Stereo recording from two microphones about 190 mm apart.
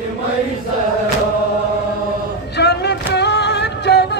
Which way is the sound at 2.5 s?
60° left (ahead or behind).